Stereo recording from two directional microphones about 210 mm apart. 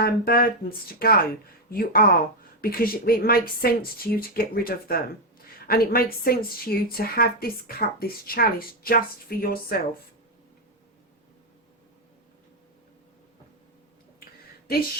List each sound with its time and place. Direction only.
0.0 s a woman's voice: 45° left (ahead or behind)